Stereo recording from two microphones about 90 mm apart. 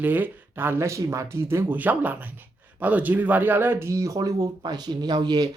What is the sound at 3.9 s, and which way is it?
Speech, 40° right (ahead or behind).